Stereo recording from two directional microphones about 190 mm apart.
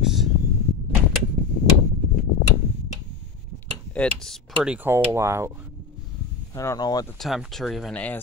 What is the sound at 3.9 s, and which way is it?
Speech, centre (ahead or behind).